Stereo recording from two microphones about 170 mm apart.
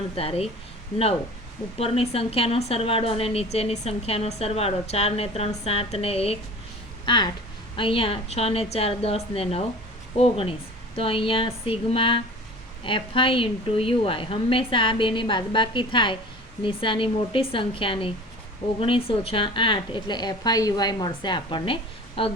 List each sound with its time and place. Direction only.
0.2 s a woman's voice: 35° left (ahead or behind)
1.8 s a woman's voice: 35° left (ahead or behind)